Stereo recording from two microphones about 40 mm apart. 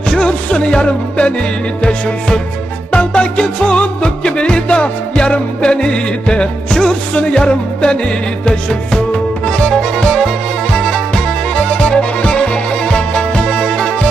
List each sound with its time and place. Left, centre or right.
0.1 s music: left